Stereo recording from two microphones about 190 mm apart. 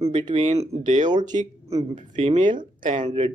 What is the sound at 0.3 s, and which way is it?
Speech, 35° right (ahead or behind).